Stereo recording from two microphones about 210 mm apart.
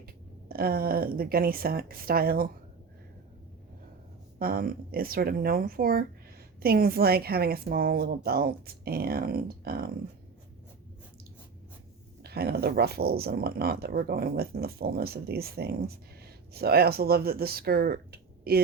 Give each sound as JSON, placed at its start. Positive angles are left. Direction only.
{"t": 0.0, "sound": "speech", "side_deg": -45}
{"t": 4.4, "sound": "speech", "side_deg": -45}
{"t": 12.2, "sound": "speech", "side_deg": -50}